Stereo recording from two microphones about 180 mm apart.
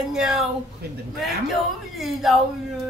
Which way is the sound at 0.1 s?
5° right (ahead or behind).